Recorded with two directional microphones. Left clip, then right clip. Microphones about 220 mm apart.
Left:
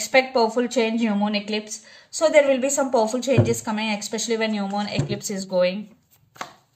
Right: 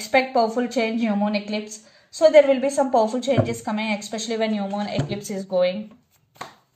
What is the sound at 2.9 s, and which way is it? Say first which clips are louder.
A woman's voice: left 1 dB; 35° left (ahead or behind).